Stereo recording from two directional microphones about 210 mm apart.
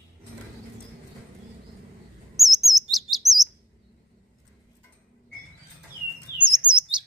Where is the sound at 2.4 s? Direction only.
Centre (ahead or behind).